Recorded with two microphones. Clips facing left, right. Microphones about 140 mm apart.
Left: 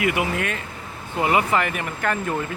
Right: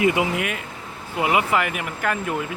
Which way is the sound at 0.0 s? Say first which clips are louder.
Right 3 dB; 20° right (ahead or behind).